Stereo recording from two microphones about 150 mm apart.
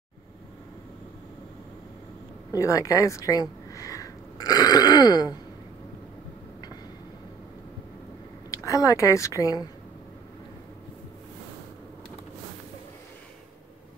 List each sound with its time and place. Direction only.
2.5 s speech: 20° left (ahead or behind)
8.5 s a woman's voice: 20° left (ahead or behind)